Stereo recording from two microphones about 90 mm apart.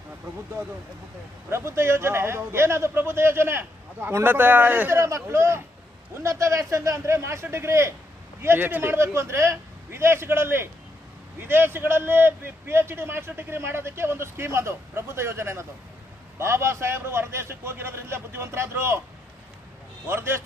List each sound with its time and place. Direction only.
1.5 s a man's voice: 30° right (ahead or behind)
4.9 s a man's voice: 35° right (ahead or behind)
20.1 s a man's voice: 30° right (ahead or behind)